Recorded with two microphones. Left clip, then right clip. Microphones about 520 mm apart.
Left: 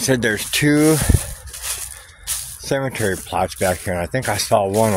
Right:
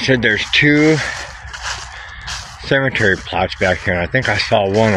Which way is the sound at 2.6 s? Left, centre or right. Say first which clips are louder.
Right 7 dB; left.